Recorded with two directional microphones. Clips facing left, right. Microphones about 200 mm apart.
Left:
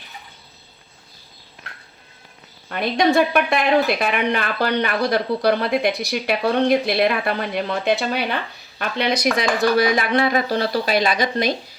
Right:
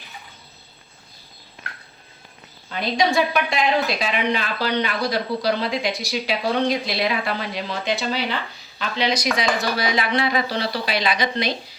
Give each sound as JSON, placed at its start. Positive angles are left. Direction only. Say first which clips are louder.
{"t": 2.6, "sound": "speech", "louder": "left 3 dB", "side_deg": 55}